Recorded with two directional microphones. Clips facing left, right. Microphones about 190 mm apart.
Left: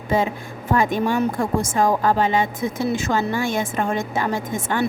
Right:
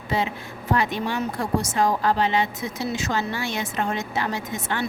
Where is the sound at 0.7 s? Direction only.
50° left (ahead or behind).